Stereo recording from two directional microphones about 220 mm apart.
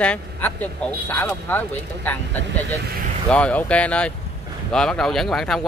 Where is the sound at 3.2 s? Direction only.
5° left (ahead or behind).